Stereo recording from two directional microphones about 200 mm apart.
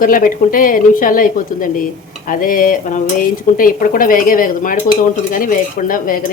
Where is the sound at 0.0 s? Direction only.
45° left (ahead or behind).